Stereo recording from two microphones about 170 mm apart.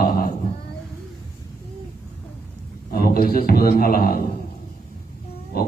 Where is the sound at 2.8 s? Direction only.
60° left (ahead or behind).